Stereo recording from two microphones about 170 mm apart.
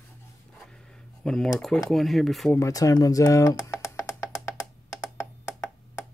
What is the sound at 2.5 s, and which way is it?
Music, 20° left (ahead or behind).